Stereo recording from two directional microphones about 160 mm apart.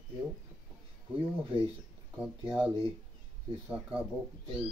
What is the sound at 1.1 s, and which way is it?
Speech, 35° right (ahead or behind).